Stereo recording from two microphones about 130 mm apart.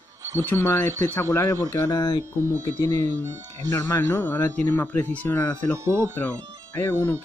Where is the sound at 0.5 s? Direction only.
15° left (ahead or behind).